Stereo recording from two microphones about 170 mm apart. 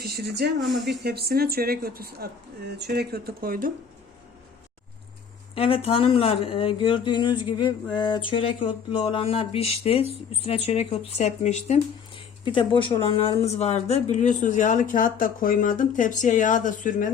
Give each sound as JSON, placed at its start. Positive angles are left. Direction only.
{"t": 0.0, "sound": "speech", "side_deg": -70}
{"t": 5.5, "sound": "speech", "side_deg": 35}